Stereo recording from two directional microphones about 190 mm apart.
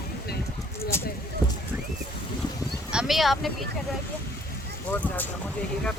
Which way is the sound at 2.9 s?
5° right (ahead or behind).